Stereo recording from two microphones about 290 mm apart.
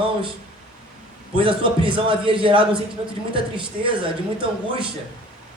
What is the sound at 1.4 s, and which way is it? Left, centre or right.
A man's voice, centre.